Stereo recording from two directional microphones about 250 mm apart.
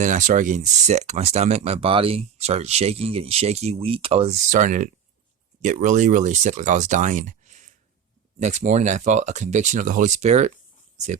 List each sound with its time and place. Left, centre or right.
0.0 s speech: right